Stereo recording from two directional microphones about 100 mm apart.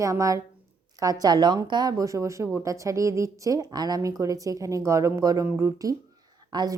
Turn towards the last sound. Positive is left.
turn(degrees=-45)  # may be behind; listen again after turning